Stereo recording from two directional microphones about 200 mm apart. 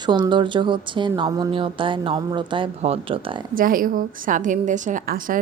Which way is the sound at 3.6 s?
45° right (ahead or behind).